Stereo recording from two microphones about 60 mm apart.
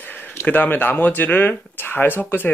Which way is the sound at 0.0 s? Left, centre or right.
Left.